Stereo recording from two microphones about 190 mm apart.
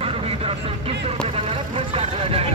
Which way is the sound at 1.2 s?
30° right (ahead or behind).